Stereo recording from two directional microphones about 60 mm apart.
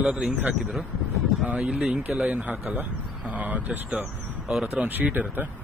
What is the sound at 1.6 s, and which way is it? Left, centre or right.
Speech, centre.